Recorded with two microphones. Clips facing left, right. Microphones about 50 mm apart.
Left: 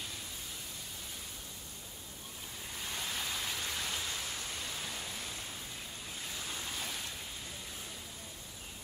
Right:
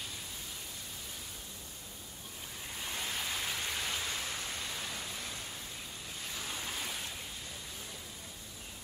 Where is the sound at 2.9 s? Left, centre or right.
Centre.